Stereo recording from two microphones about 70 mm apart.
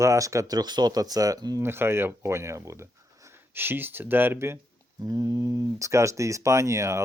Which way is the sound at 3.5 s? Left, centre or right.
Right.